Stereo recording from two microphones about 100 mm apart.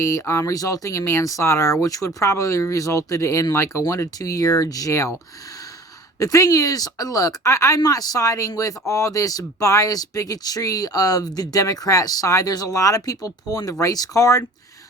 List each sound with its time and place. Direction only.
0.0 s speech: 30° left (ahead or behind)
6.1 s speech: 35° left (ahead or behind)